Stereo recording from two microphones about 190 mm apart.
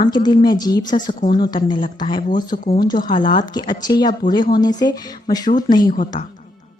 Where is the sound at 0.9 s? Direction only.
35° left (ahead or behind).